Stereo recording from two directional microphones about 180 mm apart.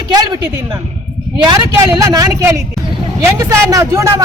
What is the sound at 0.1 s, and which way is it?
A woman's voice, 20° right (ahead or behind).